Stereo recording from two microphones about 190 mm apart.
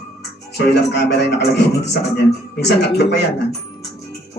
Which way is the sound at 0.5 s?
60° left (ahead or behind).